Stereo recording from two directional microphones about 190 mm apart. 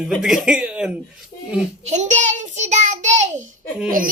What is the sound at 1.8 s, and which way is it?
A child's voice, 40° right (ahead or behind).